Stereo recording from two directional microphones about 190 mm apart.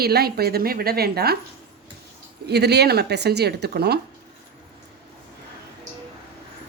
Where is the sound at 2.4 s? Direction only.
60° right (ahead or behind).